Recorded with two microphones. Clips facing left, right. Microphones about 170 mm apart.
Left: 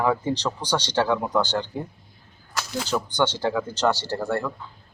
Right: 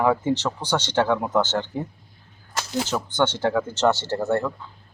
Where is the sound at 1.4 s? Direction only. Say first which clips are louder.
Right 1 dB; 20° right (ahead or behind).